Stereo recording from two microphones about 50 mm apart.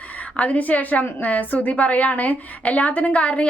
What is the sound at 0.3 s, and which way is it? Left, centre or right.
A woman's voice, left.